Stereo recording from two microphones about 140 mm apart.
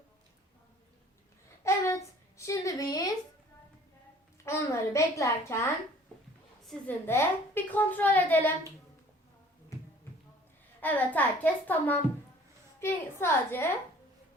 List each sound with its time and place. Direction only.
1.6 s a sound: 20° left (ahead or behind)
4.4 s a woman's voice: 20° left (ahead or behind)
7.1 s a child's voice: 15° left (ahead or behind)
10.8 s a child's voice: 10° left (ahead or behind)